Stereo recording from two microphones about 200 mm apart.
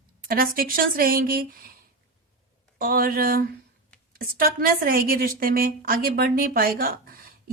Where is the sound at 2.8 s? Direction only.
45° right (ahead or behind).